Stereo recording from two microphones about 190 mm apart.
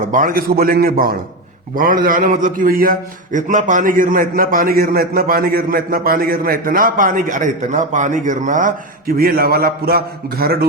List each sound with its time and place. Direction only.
0.0 s a man's voice: 45° right (ahead or behind)